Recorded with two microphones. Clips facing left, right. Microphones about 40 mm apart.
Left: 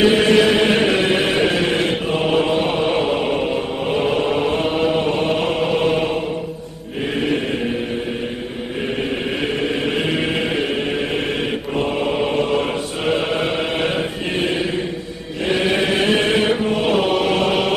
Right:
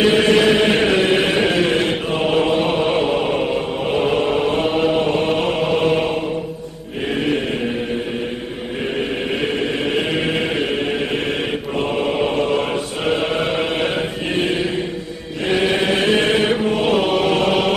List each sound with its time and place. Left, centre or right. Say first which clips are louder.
0.0 s chant: even; centre
9.8 s chant: even; centre
12.0 s chant: right 2 dB; centre